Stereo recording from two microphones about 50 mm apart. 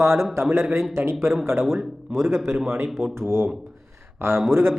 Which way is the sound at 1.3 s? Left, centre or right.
Right.